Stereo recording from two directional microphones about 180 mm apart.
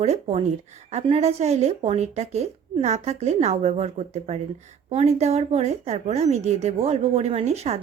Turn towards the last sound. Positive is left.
turn(degrees=-35)  # may be behind; listen again after turning